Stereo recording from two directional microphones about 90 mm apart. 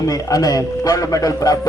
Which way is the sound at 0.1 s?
40° left (ahead or behind).